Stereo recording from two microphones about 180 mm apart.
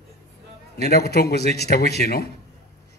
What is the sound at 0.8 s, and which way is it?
A man's voice, 65° left (ahead or behind).